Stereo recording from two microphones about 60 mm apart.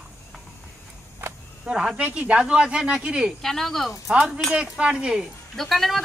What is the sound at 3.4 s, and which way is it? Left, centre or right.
Speech, centre.